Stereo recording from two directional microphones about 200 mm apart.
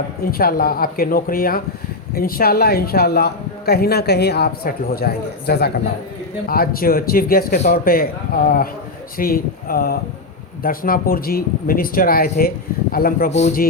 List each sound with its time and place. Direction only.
0.3 s a man's voice: 45° left (ahead or behind)